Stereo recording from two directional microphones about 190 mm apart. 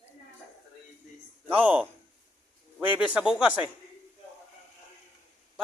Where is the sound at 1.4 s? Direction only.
10° right (ahead or behind).